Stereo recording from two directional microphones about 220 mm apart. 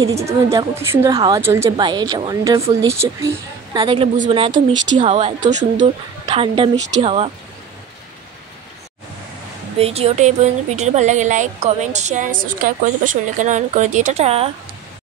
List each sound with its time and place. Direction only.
0.0 s a woman's voice: 15° right (ahead or behind)
9.8 s a woman's voice: 25° right (ahead or behind)